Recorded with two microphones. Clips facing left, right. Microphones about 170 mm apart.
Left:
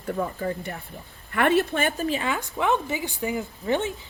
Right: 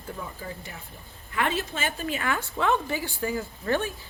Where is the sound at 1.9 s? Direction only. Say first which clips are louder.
Left 5 dB; 40° left (ahead or behind).